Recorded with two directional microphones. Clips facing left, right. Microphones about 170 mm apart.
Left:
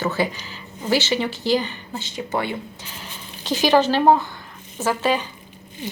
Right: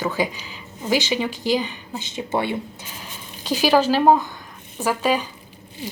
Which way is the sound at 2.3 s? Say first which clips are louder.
Right 2 dB; 25° right (ahead or behind).